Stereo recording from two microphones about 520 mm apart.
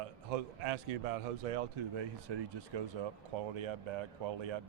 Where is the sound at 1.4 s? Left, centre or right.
Right.